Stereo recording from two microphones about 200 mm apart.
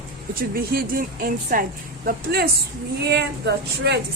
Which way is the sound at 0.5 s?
45° right (ahead or behind).